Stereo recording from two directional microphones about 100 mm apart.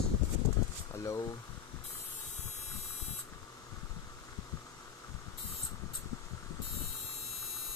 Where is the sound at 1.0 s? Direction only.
30° left (ahead or behind).